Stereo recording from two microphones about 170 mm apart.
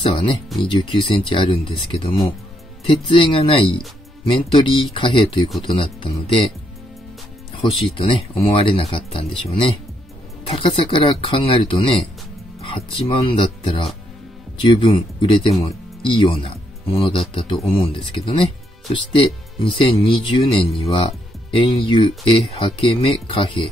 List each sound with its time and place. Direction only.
0.0 s speech: 30° left (ahead or behind)
7.6 s speech: 35° left (ahead or behind)